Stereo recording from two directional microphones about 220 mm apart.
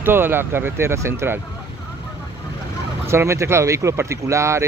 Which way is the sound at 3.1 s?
10° right (ahead or behind).